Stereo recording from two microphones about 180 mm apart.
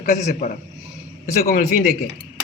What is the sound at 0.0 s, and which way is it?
Speech, 45° left (ahead or behind).